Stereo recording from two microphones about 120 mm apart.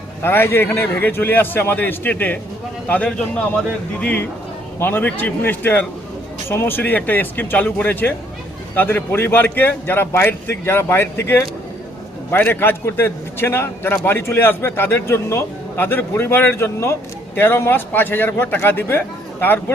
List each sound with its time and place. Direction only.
0.2 s a man's voice: 20° left (ahead or behind)